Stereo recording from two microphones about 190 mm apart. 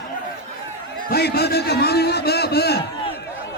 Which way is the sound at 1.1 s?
55° left (ahead or behind).